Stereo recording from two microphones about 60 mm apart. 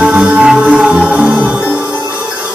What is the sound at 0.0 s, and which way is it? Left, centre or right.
Music, right.